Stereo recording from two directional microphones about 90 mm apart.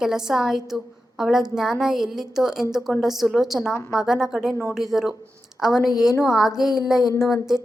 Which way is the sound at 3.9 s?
5° right (ahead or behind).